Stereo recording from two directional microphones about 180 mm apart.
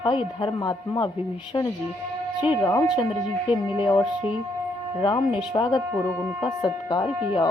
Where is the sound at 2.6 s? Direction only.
15° left (ahead or behind).